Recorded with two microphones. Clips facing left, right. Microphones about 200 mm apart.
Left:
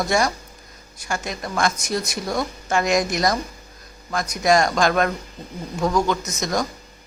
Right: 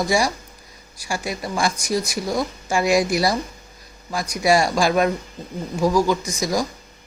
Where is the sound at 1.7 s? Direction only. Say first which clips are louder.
Right 2 dB; 5° left (ahead or behind).